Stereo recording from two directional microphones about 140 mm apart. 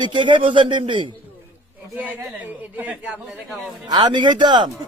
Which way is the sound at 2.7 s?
10° right (ahead or behind).